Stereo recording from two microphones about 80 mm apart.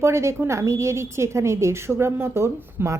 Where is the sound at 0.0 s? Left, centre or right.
Right.